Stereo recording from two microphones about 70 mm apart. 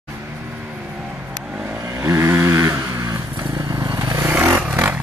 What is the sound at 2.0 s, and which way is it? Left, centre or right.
Vehicle, right.